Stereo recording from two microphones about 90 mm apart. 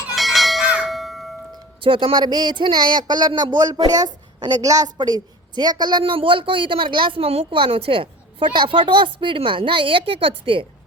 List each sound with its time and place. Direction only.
0.2 s bell: centre (ahead or behind)
1.8 s a woman's voice: 80° right; by 4.9 s 40° right (ahead or behind)
4.9 s a woman's voice: 50° right (ahead or behind); by 10.7 s 85° right